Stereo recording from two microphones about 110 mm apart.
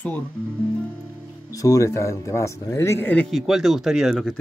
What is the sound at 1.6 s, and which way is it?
Speech, 30° left (ahead or behind).